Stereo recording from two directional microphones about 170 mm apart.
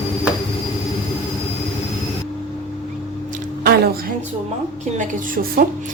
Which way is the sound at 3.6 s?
60° right (ahead or behind).